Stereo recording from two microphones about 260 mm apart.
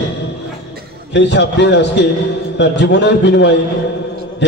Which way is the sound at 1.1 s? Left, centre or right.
Left.